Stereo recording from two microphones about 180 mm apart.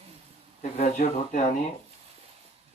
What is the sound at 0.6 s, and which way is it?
Speech, 45° left (ahead or behind).